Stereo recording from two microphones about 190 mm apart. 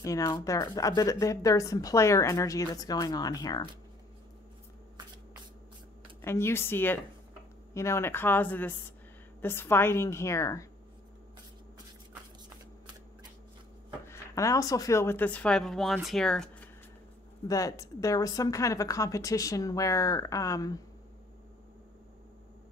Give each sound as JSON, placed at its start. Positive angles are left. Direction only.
{"t": 0.0, "sound": "speech", "side_deg": 15}
{"t": 6.2, "sound": "speech", "side_deg": 15}
{"t": 14.0, "sound": "speech", "side_deg": 15}
{"t": 17.5, "sound": "speech", "side_deg": 15}